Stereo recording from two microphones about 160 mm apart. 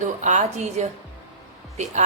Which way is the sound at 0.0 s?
50° right (ahead or behind).